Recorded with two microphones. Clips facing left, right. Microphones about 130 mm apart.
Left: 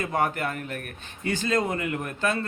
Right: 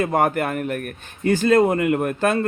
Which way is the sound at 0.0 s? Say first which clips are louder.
Right 6 dB; 50° right (ahead or behind).